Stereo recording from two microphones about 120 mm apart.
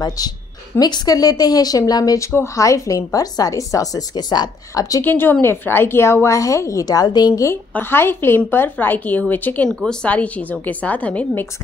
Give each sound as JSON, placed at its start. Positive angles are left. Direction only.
{"t": 0.2, "sound": "a woman's voice", "side_deg": 30}
{"t": 5.0, "sound": "a woman's voice", "side_deg": 15}
{"t": 7.7, "sound": "a woman's voice", "side_deg": 20}